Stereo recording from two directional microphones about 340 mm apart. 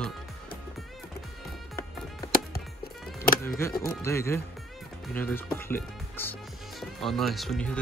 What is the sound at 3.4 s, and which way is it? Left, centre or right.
Speech, centre.